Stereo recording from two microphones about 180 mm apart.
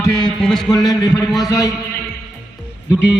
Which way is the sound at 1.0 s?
5° right (ahead or behind).